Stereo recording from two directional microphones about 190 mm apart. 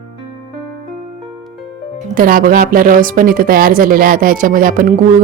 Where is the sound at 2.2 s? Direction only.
45° right (ahead or behind).